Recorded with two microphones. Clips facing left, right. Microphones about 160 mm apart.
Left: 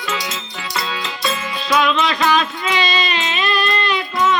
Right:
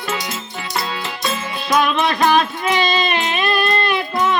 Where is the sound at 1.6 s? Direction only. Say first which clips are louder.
Even; 50° right (ahead or behind).